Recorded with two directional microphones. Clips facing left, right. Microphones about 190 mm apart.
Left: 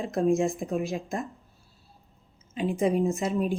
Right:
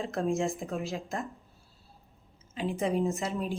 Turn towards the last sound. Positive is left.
turn(degrees=15)  # may be behind; listen again after turning